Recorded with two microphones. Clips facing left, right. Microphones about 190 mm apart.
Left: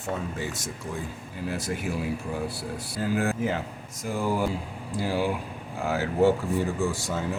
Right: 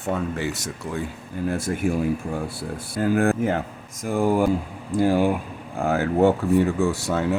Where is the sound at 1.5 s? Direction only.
50° right (ahead or behind).